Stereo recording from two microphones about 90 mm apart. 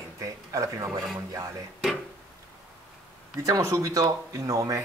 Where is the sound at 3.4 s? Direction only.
35° right (ahead or behind).